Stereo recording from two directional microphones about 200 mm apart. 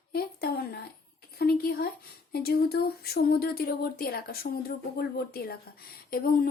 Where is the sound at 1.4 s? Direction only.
50° left (ahead or behind).